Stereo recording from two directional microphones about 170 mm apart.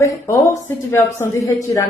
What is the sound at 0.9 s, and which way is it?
Speech, 15° left (ahead or behind).